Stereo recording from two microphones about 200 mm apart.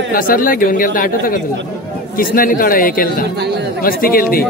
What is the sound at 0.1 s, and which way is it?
Speech, 45° left (ahead or behind).